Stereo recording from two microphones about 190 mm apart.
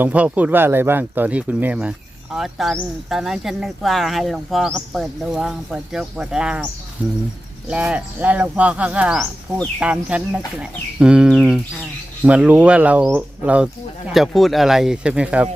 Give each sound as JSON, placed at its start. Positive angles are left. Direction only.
{"t": 0.0, "sound": "speech", "side_deg": -10}